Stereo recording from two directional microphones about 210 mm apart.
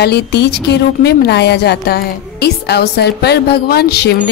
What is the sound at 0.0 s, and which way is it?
A woman's voice, 55° left (ahead or behind).